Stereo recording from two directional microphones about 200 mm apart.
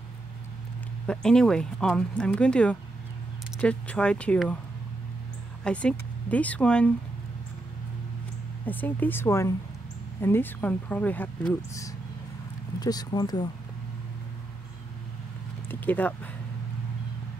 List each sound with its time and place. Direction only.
1.0 s speech: 5° left (ahead or behind)
5.6 s speech: 5° left (ahead or behind)
8.6 s speech: 10° left (ahead or behind)
15.7 s speech: 10° left (ahead or behind)